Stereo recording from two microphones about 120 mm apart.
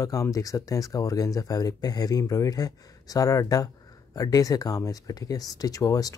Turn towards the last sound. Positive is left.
turn(degrees=30)  # may be behind; listen again after turning